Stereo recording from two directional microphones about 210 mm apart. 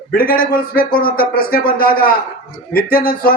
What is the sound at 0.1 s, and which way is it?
A man's voice, 45° left (ahead or behind).